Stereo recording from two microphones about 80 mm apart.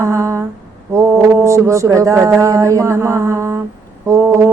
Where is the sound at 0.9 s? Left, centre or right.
Right.